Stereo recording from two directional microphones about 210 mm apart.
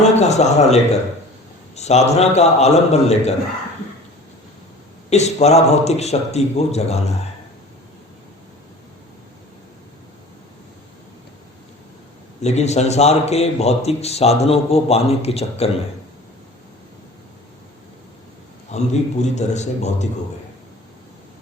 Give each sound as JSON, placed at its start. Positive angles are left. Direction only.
{"t": 0.0, "sound": "a man's voice", "side_deg": 30}
{"t": 5.0, "sound": "a man's voice", "side_deg": 30}
{"t": 12.4, "sound": "a man's voice", "side_deg": 30}
{"t": 18.7, "sound": "a man's voice", "side_deg": 30}